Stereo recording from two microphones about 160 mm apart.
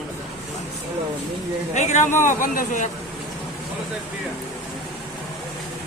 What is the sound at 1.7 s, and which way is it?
A man's voice, 45° left (ahead or behind).